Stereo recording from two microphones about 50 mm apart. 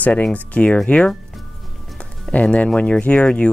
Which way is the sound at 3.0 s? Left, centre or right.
Left.